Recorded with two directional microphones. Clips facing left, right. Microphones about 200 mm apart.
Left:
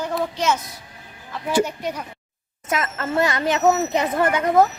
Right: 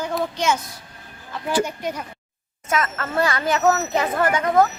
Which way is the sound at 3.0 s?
20° left (ahead or behind).